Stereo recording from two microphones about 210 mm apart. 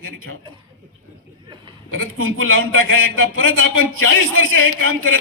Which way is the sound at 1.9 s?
75° right (ahead or behind).